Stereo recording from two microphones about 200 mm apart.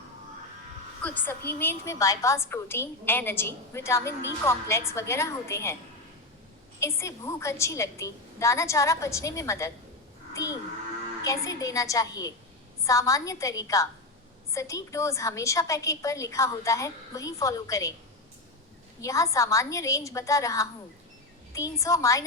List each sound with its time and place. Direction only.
1.0 s a woman's voice: 10° left (ahead or behind)
6.7 s a woman's voice: 15° left (ahead or behind)
19.0 s a woman's voice: 15° left (ahead or behind)